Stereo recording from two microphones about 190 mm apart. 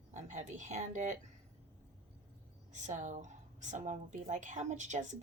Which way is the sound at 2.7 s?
40° right (ahead or behind).